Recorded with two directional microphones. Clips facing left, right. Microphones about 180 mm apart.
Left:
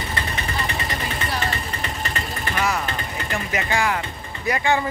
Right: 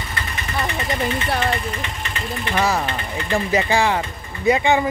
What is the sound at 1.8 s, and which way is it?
Vehicle, 40° left (ahead or behind).